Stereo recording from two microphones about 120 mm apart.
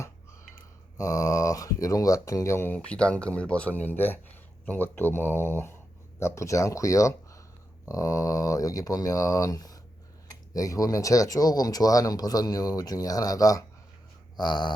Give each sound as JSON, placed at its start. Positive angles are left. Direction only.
{"t": 0.9, "sound": "speech", "side_deg": 30}